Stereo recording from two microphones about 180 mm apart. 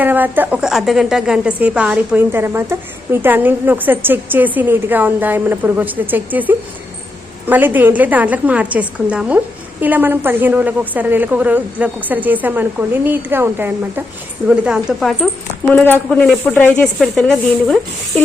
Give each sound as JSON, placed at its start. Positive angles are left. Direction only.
{"t": 0.0, "sound": "a woman's voice", "side_deg": -10}
{"t": 15.7, "sound": "speech", "side_deg": 10}